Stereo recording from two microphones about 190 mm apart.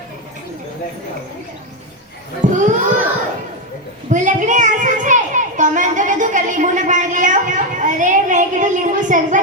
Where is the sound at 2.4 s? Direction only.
40° right (ahead or behind).